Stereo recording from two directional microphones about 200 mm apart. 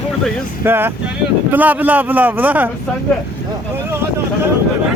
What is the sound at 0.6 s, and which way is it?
A man's voice, 10° right (ahead or behind).